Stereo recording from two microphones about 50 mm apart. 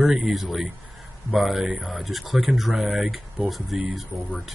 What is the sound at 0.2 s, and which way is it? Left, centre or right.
Speech, centre.